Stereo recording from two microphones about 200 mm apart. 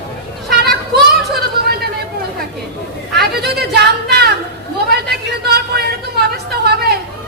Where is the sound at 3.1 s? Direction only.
55° right (ahead or behind).